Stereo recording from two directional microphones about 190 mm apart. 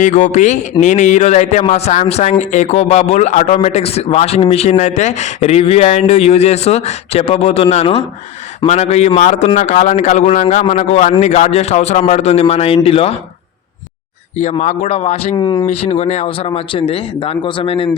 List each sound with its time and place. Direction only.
0.0 s a man's voice: 40° left (ahead or behind)
14.5 s a man's voice: 35° left (ahead or behind)